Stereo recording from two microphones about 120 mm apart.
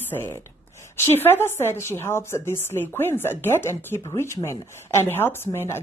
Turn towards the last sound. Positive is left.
turn(degrees=20)  # may be behind; listen again after turning